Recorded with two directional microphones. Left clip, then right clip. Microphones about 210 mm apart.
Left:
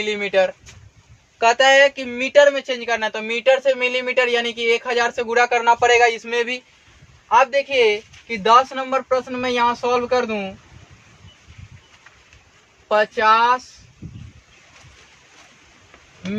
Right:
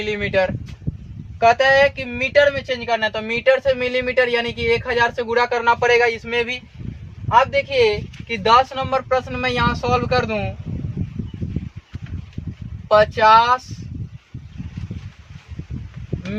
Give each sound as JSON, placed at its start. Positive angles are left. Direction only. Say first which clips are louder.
{"t": 0.1, "sound": "speech", "louder": "left 1 dB", "side_deg": 20}
{"t": 2.8, "sound": "speech", "louder": "right 4 dB", "side_deg": 15}
{"t": 12.9, "sound": "speech", "louder": "right 3 dB", "side_deg": 0}